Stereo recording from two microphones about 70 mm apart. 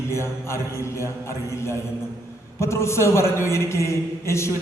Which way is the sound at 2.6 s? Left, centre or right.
Left.